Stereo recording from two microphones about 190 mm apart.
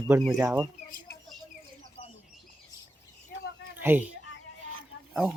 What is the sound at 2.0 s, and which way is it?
Bird, 25° left (ahead or behind).